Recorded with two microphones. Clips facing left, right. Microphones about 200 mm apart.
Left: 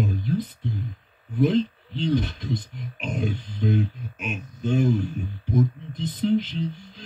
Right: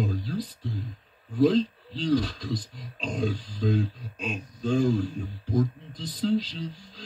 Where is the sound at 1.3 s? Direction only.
20° left (ahead or behind).